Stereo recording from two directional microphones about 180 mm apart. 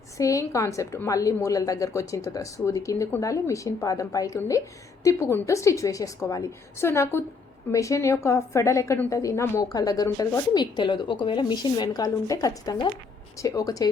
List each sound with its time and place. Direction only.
0.2 s a woman's voice: 20° left (ahead or behind)